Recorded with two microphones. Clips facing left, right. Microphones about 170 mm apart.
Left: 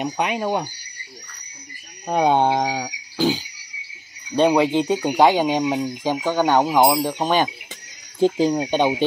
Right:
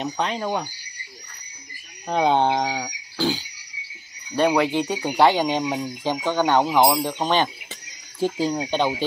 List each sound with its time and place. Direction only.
0.0 s speech: 15° left (ahead or behind)
2.0 s speech: 10° left (ahead or behind)